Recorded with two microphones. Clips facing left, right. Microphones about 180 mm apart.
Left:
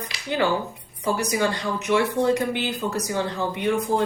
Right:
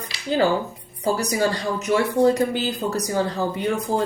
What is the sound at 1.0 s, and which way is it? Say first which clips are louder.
Speech: right 2 dB; 35° right (ahead or behind).